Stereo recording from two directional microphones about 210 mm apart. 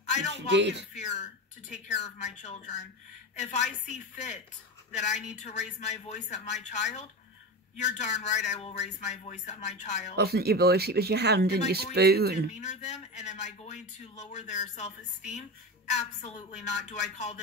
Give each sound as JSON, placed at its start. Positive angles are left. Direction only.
{"t": 0.5, "sound": "speech", "side_deg": -55}
{"t": 0.9, "sound": "a man's voice", "side_deg": 35}
{"t": 10.1, "sound": "speech", "side_deg": -50}
{"t": 12.5, "sound": "a man's voice", "side_deg": 35}